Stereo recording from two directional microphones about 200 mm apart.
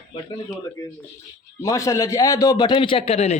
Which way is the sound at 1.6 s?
15° left (ahead or behind).